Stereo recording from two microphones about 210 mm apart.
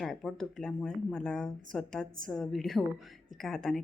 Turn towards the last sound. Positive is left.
turn(degrees=0)  # may be behind; listen again after turning